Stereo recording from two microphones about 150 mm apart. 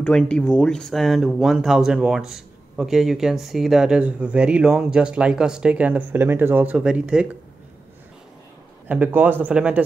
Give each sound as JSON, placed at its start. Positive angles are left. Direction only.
{"t": 0.0, "sound": "speech", "side_deg": 5}
{"t": 8.8, "sound": "speech", "side_deg": -10}